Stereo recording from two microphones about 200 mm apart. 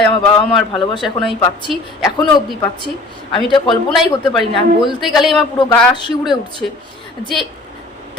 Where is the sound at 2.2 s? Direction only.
20° left (ahead or behind).